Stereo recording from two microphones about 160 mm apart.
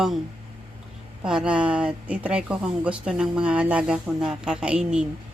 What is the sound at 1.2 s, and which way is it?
Speech, 5° right (ahead or behind).